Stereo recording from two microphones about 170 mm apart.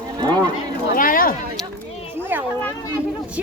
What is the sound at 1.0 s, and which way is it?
Speech, 55° left (ahead or behind).